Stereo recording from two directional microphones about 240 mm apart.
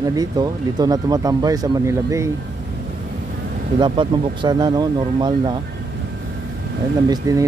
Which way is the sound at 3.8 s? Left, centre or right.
Centre.